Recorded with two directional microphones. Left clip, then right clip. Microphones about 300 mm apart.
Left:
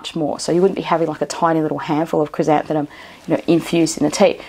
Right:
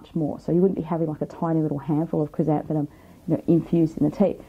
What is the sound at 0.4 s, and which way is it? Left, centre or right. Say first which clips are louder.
Speech: left 6 dB; centre.